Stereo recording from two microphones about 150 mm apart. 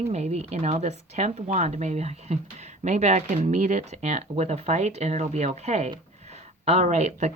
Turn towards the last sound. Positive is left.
turn(degrees=-50)  # may be behind; listen again after turning